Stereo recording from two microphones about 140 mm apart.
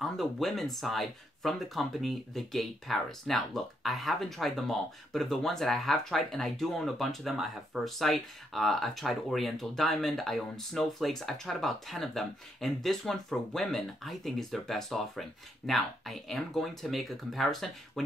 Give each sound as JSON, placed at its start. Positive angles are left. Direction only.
{"t": 0.0, "sound": "speech", "side_deg": 0}